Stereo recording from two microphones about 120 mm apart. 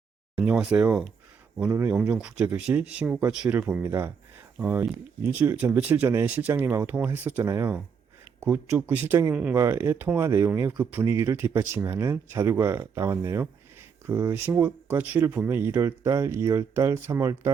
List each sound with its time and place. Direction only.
0.3 s speech: 5° right (ahead or behind)
3.8 s speech: 20° right (ahead or behind)
9.6 s speech: 20° right (ahead or behind)